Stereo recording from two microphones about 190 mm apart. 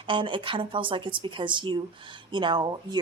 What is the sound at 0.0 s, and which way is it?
A woman's voice, 25° right (ahead or behind).